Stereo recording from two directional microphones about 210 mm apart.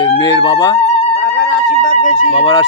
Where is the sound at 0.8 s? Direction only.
30° left (ahead or behind).